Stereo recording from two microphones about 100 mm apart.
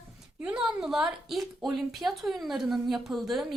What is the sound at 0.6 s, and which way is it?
A woman's voice, 5° right (ahead or behind).